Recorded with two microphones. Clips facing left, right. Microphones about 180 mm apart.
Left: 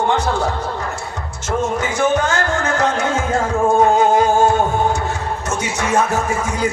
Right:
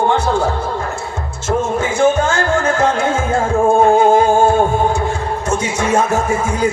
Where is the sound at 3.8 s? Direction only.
30° right (ahead or behind).